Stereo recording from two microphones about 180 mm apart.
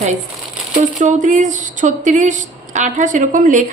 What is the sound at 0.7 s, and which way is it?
A woman's voice, 45° right (ahead or behind).